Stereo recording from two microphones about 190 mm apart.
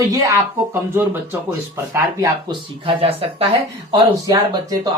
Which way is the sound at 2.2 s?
25° right (ahead or behind).